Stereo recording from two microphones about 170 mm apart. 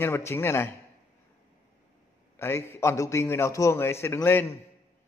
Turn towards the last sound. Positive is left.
turn(degrees=15)  # may be behind; listen again after turning